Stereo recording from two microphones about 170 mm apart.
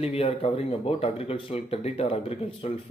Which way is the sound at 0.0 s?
35° left (ahead or behind).